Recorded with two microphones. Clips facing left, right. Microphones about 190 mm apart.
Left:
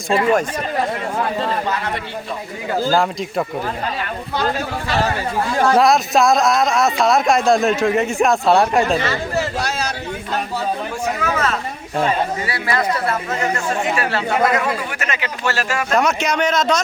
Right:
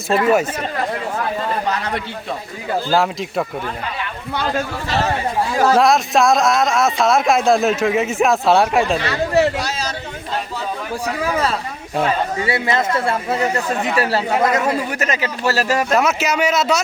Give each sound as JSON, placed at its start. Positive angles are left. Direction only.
{"t": 0.1, "sound": "speech", "side_deg": -5}
{"t": 2.9, "sound": "speech", "side_deg": 0}
{"t": 5.7, "sound": "speech", "side_deg": 0}
{"t": 9.0, "sound": "speech", "side_deg": -65}
{"t": 9.6, "sound": "chatter", "side_deg": 60}
{"t": 11.0, "sound": "a sound", "side_deg": -30}
{"t": 12.5, "sound": "speech", "side_deg": -25}
{"t": 13.6, "sound": "speech", "side_deg": -35}
{"t": 16.0, "sound": "a man's voice", "side_deg": -5}